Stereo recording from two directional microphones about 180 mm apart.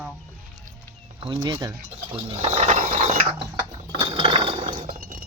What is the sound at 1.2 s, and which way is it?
Speech, 25° right (ahead or behind).